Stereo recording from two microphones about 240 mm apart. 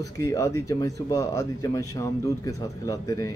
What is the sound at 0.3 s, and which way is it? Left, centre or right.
Speech, centre.